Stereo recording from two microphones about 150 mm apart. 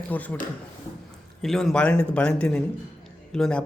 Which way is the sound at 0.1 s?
10° left (ahead or behind).